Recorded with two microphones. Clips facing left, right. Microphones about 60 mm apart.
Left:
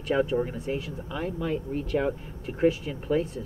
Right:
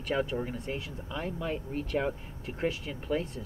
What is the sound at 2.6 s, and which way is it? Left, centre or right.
Speech, centre.